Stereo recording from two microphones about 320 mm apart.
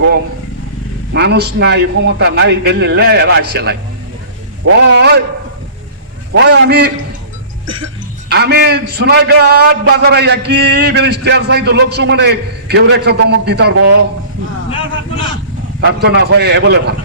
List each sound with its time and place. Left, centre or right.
1.1 s a man's voice: right
6.3 s a man's voice: right
8.3 s a man's voice: right
15.8 s a man's voice: right